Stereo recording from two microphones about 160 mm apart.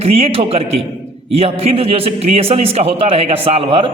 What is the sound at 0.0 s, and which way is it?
A man's voice, 40° right (ahead or behind).